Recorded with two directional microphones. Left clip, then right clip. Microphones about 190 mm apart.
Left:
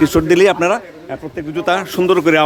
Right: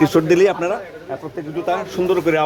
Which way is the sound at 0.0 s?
10° left (ahead or behind).